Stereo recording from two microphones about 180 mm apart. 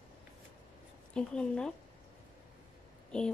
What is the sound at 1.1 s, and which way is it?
Speech, 5° left (ahead or behind).